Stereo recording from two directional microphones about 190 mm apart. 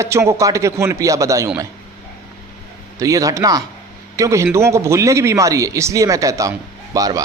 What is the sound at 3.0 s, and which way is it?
A man's voice, 15° right (ahead or behind).